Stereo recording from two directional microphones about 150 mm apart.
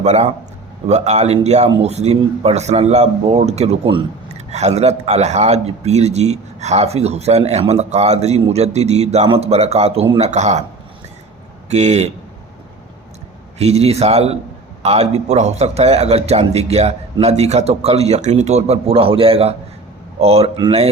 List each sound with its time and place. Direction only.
0.0 s a man's voice: 50° right (ahead or behind)
11.7 s a man's voice: 50° right (ahead or behind)
13.6 s a man's voice: 45° right (ahead or behind)